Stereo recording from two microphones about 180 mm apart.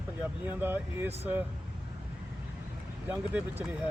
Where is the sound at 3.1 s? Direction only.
10° right (ahead or behind).